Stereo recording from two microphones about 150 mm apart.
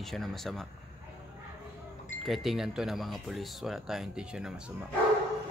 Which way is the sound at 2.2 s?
Centre (ahead or behind).